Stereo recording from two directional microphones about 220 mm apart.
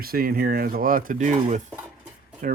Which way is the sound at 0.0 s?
40° right (ahead or behind).